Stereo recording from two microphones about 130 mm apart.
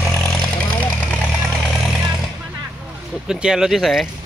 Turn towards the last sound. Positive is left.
turn(degrees=0)  # may be behind; listen again after turning